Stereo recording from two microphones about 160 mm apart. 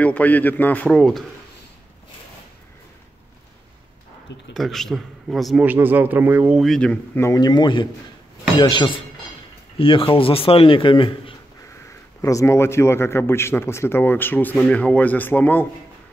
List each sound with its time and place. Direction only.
0.0 s a man's voice: 10° left (ahead or behind)
4.6 s speech: centre (ahead or behind)
5.7 s speech: 10° right (ahead or behind)
6.6 s a man's voice: 5° left (ahead or behind); by 11.3 s 30° left (ahead or behind)
12.2 s a man's voice: 20° left (ahead or behind)